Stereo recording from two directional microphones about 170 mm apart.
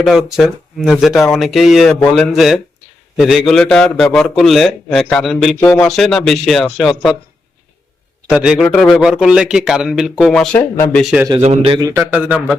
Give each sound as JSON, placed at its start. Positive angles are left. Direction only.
{"t": 0.0, "sound": "a man's voice", "side_deg": 0}
{"t": 5.5, "sound": "speech", "side_deg": 15}
{"t": 5.8, "sound": "a man's voice", "side_deg": 5}
{"t": 8.3, "sound": "a man's voice", "side_deg": -5}
{"t": 10.6, "sound": "speech", "side_deg": 15}
{"t": 11.0, "sound": "a man's voice", "side_deg": -5}
{"t": 11.4, "sound": "a man's voice", "side_deg": -35}
{"t": 11.8, "sound": "speech", "side_deg": -15}